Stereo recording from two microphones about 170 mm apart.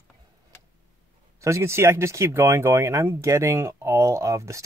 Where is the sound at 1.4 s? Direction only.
15° right (ahead or behind).